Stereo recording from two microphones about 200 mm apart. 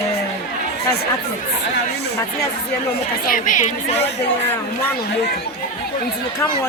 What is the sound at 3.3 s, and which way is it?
Speech, 40° left (ahead or behind).